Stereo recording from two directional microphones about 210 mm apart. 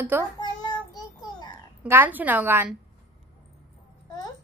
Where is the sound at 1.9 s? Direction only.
10° right (ahead or behind).